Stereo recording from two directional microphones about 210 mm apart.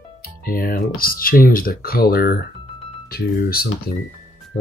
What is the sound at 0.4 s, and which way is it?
Speech, 45° left (ahead or behind).